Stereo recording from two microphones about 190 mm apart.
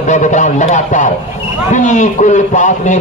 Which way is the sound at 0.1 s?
40° left (ahead or behind).